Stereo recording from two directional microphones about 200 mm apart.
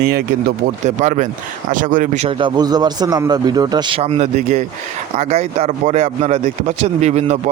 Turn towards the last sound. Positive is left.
turn(degrees=-35)  # may be behind; listen again after turning